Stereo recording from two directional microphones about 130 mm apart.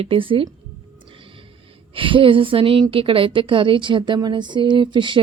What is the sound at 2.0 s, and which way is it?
A woman's voice, 40° right (ahead or behind).